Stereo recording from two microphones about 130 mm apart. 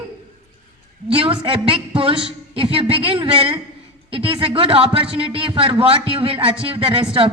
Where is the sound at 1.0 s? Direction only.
45° right (ahead or behind).